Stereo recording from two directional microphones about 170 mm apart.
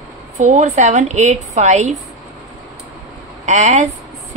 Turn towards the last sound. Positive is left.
turn(degrees=-45)  # may be behind; listen again after turning